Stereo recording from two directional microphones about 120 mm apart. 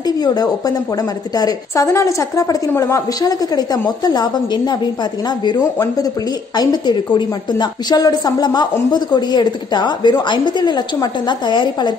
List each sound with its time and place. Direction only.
0.2 s a woman's voice: 30° left (ahead or behind)
6.5 s a woman's voice: 35° left (ahead or behind)